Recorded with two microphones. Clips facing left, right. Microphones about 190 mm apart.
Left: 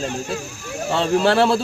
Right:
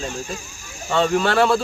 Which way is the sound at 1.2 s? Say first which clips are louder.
Left 4 dB; 30° left (ahead or behind).